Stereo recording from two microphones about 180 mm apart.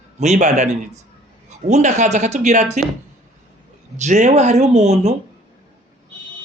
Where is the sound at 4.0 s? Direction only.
40° right (ahead or behind).